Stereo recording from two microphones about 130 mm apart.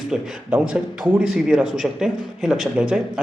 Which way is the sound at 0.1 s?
5° right (ahead or behind).